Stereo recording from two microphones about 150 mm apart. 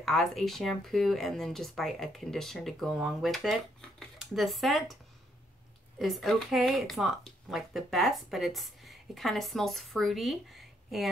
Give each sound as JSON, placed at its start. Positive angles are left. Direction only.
{"t": 0.0, "sound": "speech", "side_deg": 0}
{"t": 5.9, "sound": "speech", "side_deg": 0}